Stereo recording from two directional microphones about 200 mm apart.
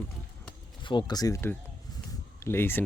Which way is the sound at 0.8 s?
25° left (ahead or behind).